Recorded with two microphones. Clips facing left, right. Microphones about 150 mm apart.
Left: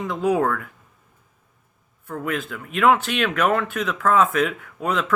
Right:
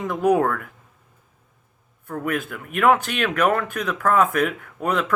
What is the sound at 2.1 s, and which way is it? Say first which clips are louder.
Speech: right 1 dB; 50° right (ahead or behind).